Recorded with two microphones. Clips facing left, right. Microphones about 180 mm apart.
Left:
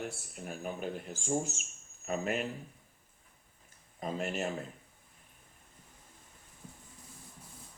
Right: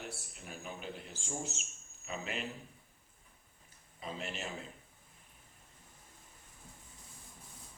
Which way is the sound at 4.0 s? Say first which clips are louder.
Left 7 dB; 50° left (ahead or behind).